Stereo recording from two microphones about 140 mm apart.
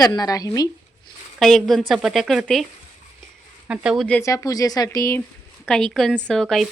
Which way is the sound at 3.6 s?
5° right (ahead or behind).